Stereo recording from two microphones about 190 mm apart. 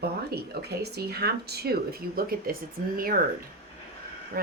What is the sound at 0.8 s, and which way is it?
Speech, 55° right (ahead or behind).